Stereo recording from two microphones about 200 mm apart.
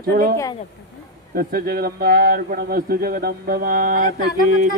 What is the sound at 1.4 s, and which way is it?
Speech, 50° right (ahead or behind).